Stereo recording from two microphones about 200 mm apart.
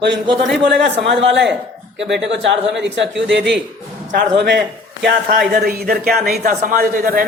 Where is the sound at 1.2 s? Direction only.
60° right (ahead or behind).